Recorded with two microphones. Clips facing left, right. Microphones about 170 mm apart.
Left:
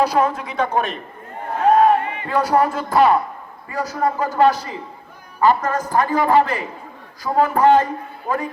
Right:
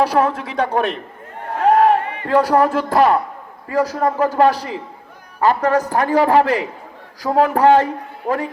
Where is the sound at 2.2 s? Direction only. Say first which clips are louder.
Right 4 dB; 65° right (ahead or behind).